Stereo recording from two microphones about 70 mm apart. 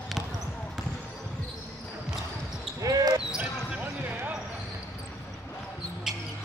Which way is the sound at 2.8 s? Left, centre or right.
Right.